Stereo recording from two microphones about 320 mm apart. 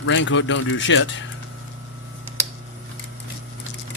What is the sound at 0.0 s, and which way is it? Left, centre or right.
Speech, left.